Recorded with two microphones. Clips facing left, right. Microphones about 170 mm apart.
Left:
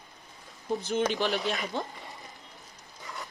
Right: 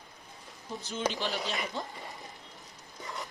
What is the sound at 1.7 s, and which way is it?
Speech, 60° left (ahead or behind).